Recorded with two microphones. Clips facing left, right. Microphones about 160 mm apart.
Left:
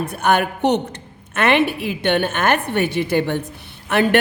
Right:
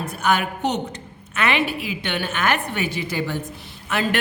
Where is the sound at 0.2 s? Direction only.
55° left (ahead or behind).